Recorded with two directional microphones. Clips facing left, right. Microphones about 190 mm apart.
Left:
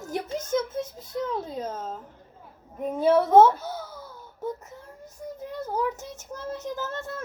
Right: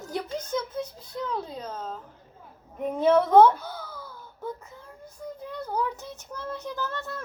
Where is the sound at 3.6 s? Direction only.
45° left (ahead or behind).